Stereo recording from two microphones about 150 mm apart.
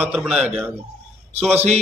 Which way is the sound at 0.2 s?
5° right (ahead or behind).